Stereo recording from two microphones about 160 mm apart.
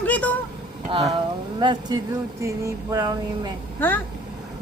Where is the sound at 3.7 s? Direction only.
10° left (ahead or behind).